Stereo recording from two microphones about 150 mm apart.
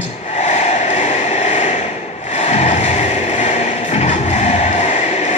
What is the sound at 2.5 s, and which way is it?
Music, 50° left (ahead or behind).